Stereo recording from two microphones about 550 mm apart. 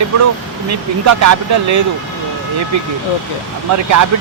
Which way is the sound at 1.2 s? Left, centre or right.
Right.